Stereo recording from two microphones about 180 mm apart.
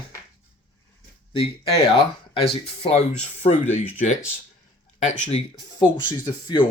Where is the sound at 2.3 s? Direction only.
30° left (ahead or behind).